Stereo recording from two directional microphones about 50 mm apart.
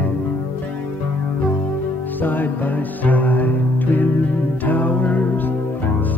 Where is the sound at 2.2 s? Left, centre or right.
Left.